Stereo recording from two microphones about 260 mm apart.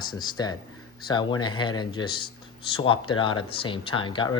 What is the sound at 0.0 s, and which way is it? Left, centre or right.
Speech, centre.